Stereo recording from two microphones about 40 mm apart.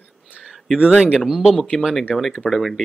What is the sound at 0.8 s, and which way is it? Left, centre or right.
Speech, right.